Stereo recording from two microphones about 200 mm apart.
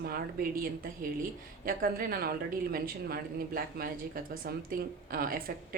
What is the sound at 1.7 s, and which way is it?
A woman's voice, 45° right (ahead or behind).